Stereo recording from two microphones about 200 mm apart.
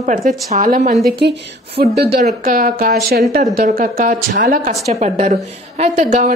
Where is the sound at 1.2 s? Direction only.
55° right (ahead or behind).